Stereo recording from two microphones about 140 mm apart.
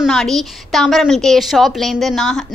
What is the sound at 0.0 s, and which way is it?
A woman's voice, centre (ahead or behind).